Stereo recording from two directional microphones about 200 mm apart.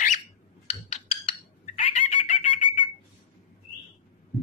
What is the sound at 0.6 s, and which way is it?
Chicken, 30° left (ahead or behind).